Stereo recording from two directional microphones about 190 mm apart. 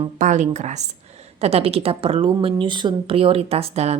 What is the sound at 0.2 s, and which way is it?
A woman's voice, 40° right (ahead or behind).